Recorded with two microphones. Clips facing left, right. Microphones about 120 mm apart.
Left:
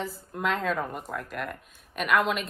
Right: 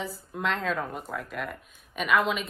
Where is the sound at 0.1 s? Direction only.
Centre (ahead or behind).